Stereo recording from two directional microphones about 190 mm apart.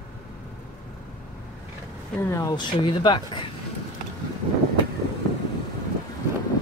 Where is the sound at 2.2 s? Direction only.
15° left (ahead or behind).